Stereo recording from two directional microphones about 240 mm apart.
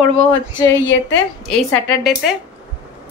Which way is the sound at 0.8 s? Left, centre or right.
Left.